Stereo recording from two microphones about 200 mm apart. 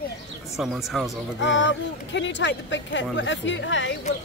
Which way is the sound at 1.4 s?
65° left (ahead or behind).